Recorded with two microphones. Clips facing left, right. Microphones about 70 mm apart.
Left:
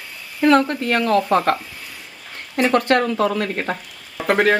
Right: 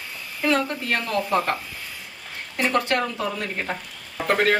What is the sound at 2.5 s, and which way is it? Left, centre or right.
Speech, left.